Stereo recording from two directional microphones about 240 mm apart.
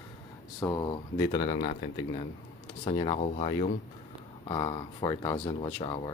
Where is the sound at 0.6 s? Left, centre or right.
Centre.